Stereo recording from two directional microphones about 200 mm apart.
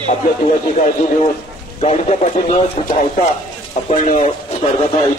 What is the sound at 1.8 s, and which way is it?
A man's voice, 35° left (ahead or behind).